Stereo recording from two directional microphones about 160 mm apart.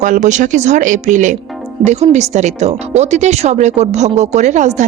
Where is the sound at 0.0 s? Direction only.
50° right (ahead or behind).